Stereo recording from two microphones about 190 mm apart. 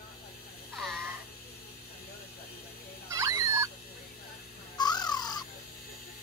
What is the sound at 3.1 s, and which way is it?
Dog, 15° right (ahead or behind).